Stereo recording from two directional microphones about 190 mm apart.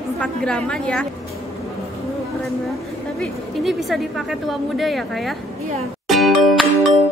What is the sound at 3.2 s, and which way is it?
A woman's voice, centre (ahead or behind).